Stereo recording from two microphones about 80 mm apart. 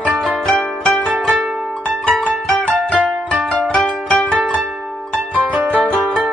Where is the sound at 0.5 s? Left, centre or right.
Centre.